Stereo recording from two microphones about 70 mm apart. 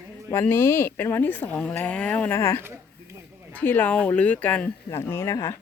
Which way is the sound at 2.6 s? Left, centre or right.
Right.